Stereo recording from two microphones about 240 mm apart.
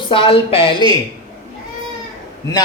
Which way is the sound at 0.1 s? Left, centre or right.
Left.